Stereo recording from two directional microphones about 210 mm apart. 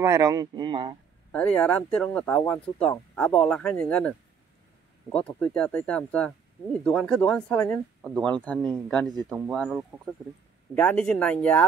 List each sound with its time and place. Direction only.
0.0 s speech: 15° right (ahead or behind)
1.3 s speech: 5° left (ahead or behind)
5.4 s speech: 5° left (ahead or behind)